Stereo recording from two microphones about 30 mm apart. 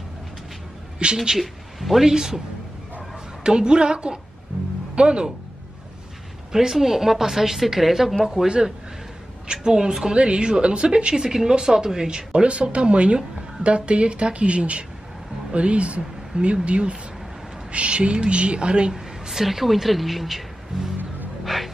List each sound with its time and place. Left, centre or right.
1.1 s a woman's voice: centre
1.4 s speech: centre
2.0 s speech: centre
3.4 s speech: right
6.5 s a woman's voice: centre
8.5 s speech: right
10.1 s speech: right
11.2 s a woman's voice: centre
12.4 s speech: right
18.9 s a woman's voice: centre
21.5 s a sound: centre